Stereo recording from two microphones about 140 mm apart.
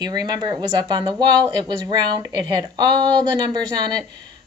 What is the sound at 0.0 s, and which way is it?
Speech, 30° right (ahead or behind).